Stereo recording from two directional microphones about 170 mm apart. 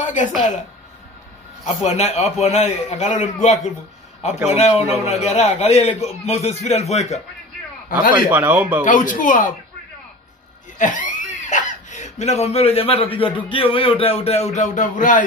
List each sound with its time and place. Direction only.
0.0 s a sound: 45° left (ahead or behind)
1.6 s speech: 40° left (ahead or behind)
8.1 s speech: 10° right (ahead or behind)
8.8 s speech: 50° left (ahead or behind)
10.8 s speech: 50° left (ahead or behind)